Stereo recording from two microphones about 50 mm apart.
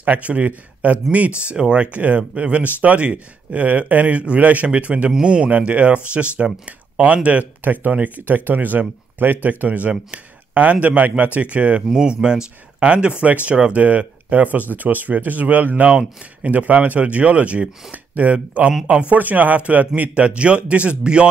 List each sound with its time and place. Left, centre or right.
0.0 s a man's voice: right
5.1 s speech: centre
11.9 s speech: centre; by 15.7 s right
15.8 s speech: right
16.4 s speech: right
19.1 s speech: right